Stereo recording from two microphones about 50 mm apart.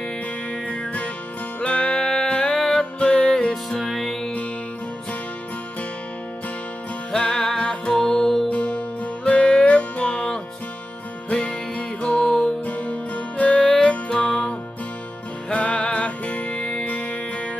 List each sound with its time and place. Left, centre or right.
1.6 s music: left
2.0 s music: centre
2.3 s music: left
3.8 s music: centre
7.2 s music: centre
8.5 s music: left
12.6 s music: left
15.5 s music: left